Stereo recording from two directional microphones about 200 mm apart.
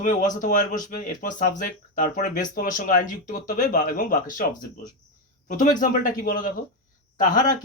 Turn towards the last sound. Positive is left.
turn(degrees=40)  # may be behind; listen again after turning